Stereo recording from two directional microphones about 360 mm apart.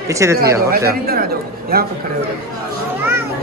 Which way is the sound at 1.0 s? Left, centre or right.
Right.